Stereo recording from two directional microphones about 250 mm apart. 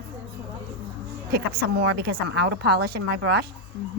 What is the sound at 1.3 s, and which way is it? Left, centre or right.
A woman's voice, right.